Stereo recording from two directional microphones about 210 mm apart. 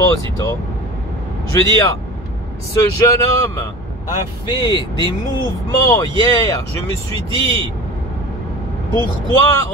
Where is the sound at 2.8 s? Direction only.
15° left (ahead or behind).